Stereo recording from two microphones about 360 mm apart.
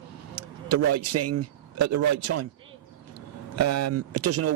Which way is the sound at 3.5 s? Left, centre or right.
Right.